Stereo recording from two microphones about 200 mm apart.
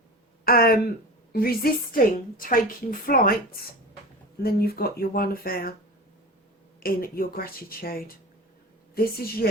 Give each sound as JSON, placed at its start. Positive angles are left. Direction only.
{"t": 0.4, "sound": "a woman's voice", "side_deg": 45}
{"t": 4.4, "sound": "a woman's voice", "side_deg": 50}
{"t": 6.7, "sound": "a woman's voice", "side_deg": 45}